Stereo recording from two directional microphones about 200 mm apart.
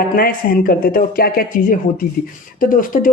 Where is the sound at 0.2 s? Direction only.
45° left (ahead or behind).